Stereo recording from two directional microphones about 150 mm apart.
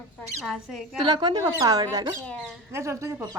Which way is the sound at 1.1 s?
30° right (ahead or behind).